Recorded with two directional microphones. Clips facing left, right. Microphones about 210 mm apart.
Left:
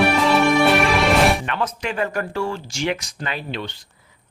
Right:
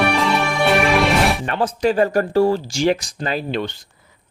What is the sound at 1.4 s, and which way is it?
Speech, 35° right (ahead or behind).